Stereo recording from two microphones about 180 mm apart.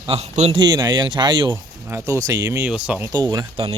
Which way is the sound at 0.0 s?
35° right (ahead or behind).